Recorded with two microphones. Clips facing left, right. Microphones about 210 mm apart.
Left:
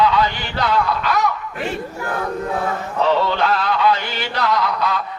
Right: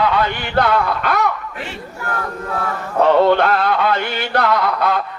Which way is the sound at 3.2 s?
55° right (ahead or behind).